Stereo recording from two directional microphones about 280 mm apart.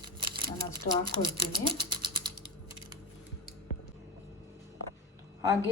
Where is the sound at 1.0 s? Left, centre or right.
Centre.